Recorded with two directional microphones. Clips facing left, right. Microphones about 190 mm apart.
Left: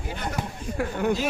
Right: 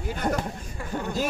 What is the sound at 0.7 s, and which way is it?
Speech, 75° left (ahead or behind).